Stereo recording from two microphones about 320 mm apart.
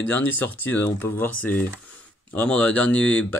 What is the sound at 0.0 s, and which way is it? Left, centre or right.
Speech, centre.